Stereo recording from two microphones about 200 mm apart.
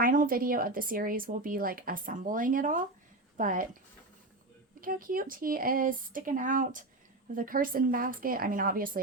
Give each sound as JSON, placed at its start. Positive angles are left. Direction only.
{"t": 0.0, "sound": "speech", "side_deg": -45}
{"t": 4.8, "sound": "speech", "side_deg": -45}